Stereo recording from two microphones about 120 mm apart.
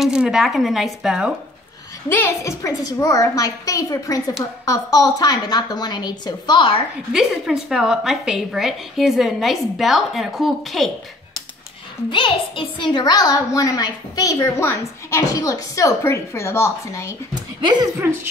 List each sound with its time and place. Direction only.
0.0 s a woman's voice: 5° right (ahead or behind)
2.0 s a woman's voice: 20° left (ahead or behind); by 6.8 s 45° left (ahead or behind)
7.1 s a woman's voice: 5° right (ahead or behind)
12.1 s a woman's voice: 45° left (ahead or behind); by 17.1 s 25° left (ahead or behind)
17.3 s speech: 35° right (ahead or behind)
17.9 s speech: 20° right (ahead or behind)